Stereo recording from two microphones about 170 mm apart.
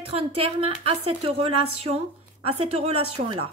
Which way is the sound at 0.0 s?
35° right (ahead or behind).